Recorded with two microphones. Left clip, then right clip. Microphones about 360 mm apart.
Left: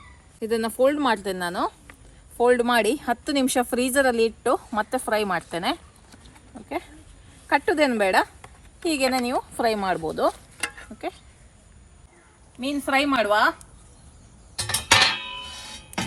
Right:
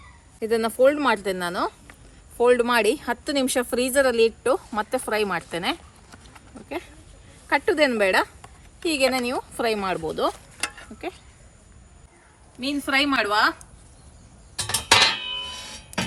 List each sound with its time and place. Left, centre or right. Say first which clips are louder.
0.3 s speech: right 2 dB; centre
0.9 s speech: right 1 dB; centre
7.5 s speech: even; centre
8.4 s a sound: right 1 dB; centre
9.2 s speech: left 1 dB; centre
10.3 s stir: even; centre
12.5 s speech: even; centre
14.5 s music: even; centre